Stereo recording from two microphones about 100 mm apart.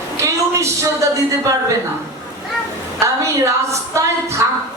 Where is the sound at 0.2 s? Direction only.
30° right (ahead or behind).